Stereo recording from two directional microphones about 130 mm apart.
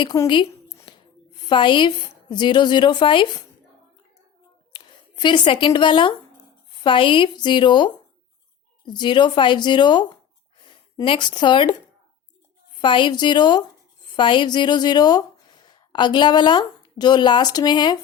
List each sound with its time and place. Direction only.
0.0 s a woman's voice: 25° left (ahead or behind)
0.9 s a sound: 35° left (ahead or behind)
1.5 s a woman's voice: 40° left (ahead or behind)
4.7 s a woman's voice: 35° left (ahead or behind)
12.8 s a woman's voice: 40° left (ahead or behind)